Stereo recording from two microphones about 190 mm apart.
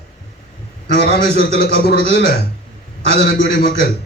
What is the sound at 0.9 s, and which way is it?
A man's voice, 60° left (ahead or behind).